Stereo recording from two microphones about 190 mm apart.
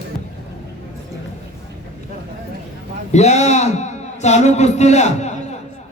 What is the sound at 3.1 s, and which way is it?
A man's voice, 35° left (ahead or behind).